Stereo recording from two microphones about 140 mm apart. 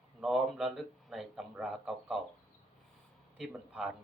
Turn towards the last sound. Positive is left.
turn(degrees=-5)  # may be behind; listen again after turning